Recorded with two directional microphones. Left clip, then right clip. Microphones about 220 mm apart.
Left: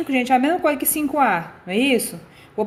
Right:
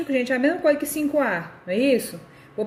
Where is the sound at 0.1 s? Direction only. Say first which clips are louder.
Left 4 dB; 35° left (ahead or behind).